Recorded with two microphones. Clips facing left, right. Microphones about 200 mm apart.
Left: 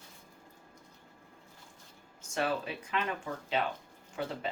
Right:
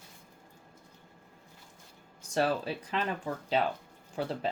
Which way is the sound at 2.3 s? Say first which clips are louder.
Right 4 dB; 35° right (ahead or behind).